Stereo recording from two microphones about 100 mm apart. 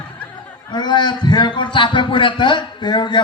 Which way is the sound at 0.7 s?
45° left (ahead or behind).